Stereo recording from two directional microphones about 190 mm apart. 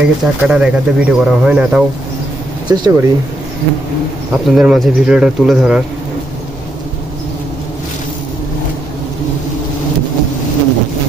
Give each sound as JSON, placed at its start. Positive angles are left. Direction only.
{"t": 0.0, "sound": "speech", "side_deg": -5}
{"t": 2.7, "sound": "speech", "side_deg": -20}
{"t": 4.3, "sound": "speech", "side_deg": -5}